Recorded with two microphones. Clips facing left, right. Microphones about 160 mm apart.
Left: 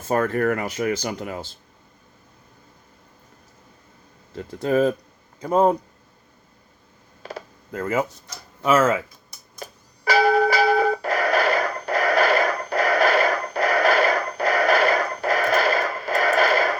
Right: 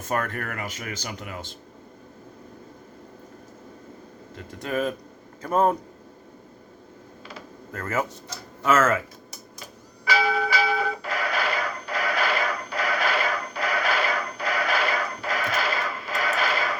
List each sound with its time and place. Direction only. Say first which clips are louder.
0.1 s speech: left 8 dB; 30° left (ahead or behind)
4.6 s speech: left 7 dB; 30° left (ahead or behind)
5.4 s speech: left 3 dB; 20° left (ahead or behind)
7.7 s speech: left 4 dB; 15° left (ahead or behind)
9.6 s a sound: left 4 dB; 45° left (ahead or behind)